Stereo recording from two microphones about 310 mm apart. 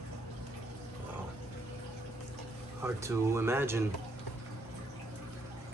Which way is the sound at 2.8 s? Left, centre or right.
Centre.